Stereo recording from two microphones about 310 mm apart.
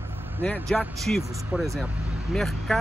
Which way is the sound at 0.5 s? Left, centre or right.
Centre.